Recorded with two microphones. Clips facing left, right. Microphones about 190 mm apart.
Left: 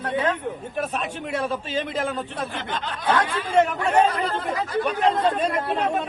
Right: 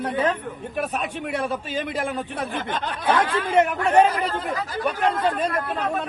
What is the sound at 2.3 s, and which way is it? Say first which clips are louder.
Speech: right 2 dB; 25° right (ahead or behind).